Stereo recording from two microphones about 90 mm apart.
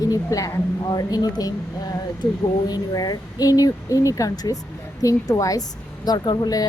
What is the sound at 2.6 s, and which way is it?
A woman's voice, 45° left (ahead or behind).